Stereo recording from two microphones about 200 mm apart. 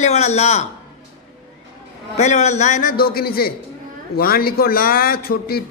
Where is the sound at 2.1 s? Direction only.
35° left (ahead or behind).